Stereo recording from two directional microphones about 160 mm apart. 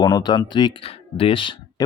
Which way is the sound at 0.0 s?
25° left (ahead or behind).